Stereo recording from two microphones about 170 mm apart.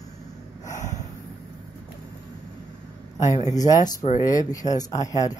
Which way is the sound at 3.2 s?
45° left (ahead or behind).